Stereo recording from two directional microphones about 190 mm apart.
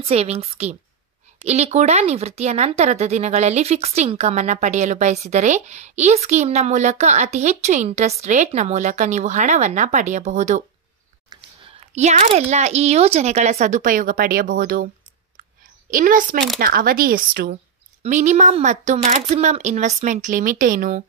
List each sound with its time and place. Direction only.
0.0 s speech: 35° right (ahead or behind)
11.9 s speech: 35° right (ahead or behind)
15.9 s speech: 45° right (ahead or behind)
18.0 s speech: 40° right (ahead or behind)